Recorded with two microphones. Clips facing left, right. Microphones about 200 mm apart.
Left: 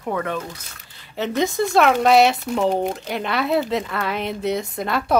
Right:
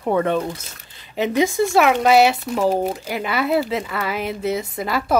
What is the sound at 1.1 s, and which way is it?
Speech, 10° right (ahead or behind).